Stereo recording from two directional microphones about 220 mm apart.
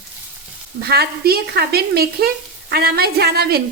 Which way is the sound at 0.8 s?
45° right (ahead or behind).